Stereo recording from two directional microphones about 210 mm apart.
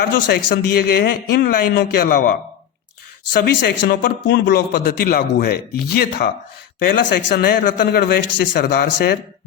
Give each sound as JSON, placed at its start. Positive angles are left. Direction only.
{"t": 0.0, "sound": "a man's voice", "side_deg": 50}
{"t": 3.3, "sound": "a man's voice", "side_deg": 55}